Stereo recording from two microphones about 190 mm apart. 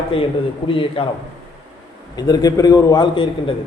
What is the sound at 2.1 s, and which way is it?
A man's voice, 20° left (ahead or behind).